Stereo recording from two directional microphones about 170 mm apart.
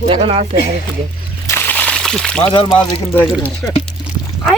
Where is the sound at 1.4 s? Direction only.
10° left (ahead or behind).